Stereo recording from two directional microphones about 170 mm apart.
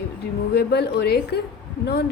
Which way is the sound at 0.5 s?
70° left (ahead or behind).